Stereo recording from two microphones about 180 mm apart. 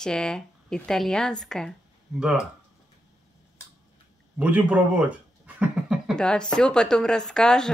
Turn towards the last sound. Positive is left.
turn(degrees=5)  # may be behind; listen again after turning